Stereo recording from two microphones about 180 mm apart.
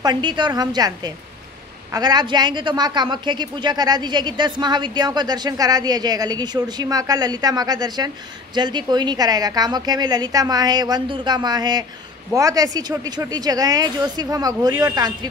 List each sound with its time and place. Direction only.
0.0 s a man's voice: 25° right (ahead or behind)